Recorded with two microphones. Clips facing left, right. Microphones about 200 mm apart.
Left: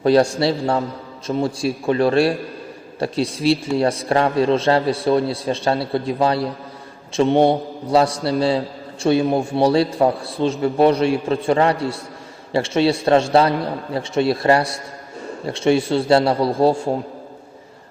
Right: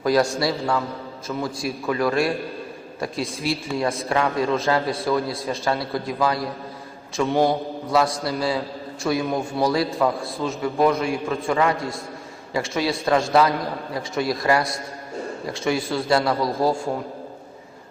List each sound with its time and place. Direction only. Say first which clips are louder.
0.0 s a man's voice: left 5 dB; 30° left (ahead or behind)